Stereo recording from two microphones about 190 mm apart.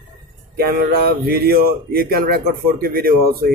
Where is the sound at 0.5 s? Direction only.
50° right (ahead or behind).